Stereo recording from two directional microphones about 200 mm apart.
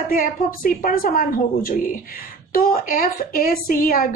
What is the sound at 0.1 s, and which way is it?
A woman's voice, 45° left (ahead or behind).